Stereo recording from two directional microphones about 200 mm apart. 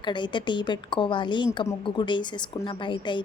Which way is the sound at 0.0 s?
25° left (ahead or behind).